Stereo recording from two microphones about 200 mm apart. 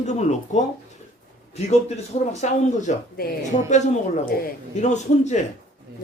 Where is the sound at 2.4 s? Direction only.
35° left (ahead or behind).